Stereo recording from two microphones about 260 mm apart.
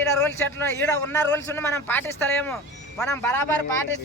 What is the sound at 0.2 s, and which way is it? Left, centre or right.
A man's voice, centre.